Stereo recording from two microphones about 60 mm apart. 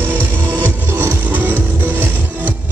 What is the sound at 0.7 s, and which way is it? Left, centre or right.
Music, right.